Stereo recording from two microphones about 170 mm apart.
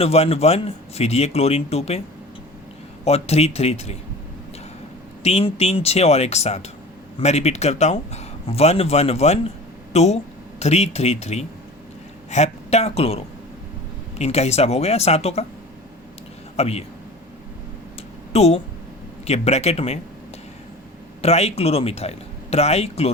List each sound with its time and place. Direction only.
0.0 s speech: 35° left (ahead or behind)
3.0 s speech: 40° left (ahead or behind)
5.2 s speech: 35° left (ahead or behind)
16.6 s speech: 35° left (ahead or behind)
18.3 s speech: 40° left (ahead or behind)
21.2 s speech: 35° left (ahead or behind)